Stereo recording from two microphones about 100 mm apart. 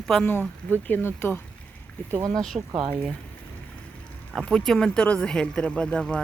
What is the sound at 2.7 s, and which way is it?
Speech, 55° right (ahead or behind).